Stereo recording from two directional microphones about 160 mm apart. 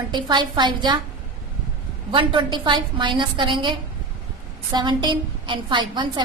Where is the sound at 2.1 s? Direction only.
30° right (ahead or behind).